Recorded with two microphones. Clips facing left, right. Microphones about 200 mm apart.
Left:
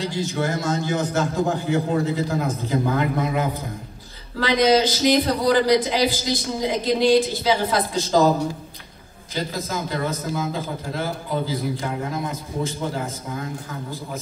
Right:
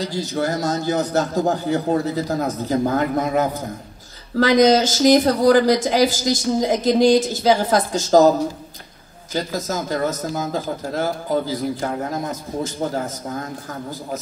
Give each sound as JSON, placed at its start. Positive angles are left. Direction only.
{"t": 0.0, "sound": "a man's voice", "side_deg": -40}
{"t": 9.3, "sound": "a man's voice", "side_deg": -45}